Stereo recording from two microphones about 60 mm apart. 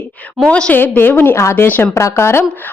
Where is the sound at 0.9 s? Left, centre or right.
Left.